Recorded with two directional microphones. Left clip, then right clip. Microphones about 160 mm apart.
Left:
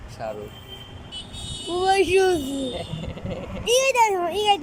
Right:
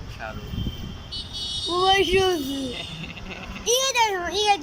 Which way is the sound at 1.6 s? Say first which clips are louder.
Even; 10° left (ahead or behind).